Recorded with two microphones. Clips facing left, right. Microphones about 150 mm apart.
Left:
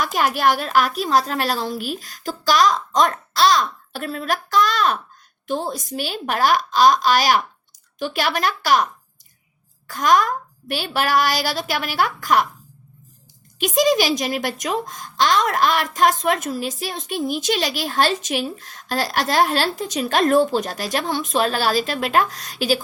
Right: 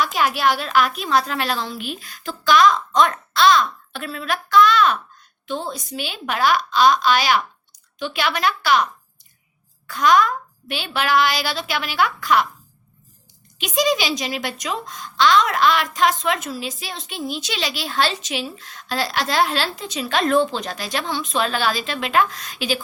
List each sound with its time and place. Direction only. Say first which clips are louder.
0.0 s a woman's voice: left 1 dB; 45° left (ahead or behind)
13.6 s a woman's voice: left 3 dB; 45° left (ahead or behind)